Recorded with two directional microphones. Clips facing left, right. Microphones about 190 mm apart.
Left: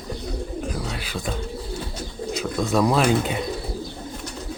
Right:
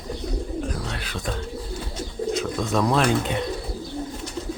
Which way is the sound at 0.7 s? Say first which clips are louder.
Left 1 dB; 5° left (ahead or behind).